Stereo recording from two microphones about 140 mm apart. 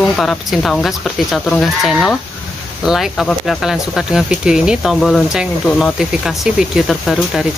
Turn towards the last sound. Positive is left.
turn(degrees=0)  # may be behind; listen again after turning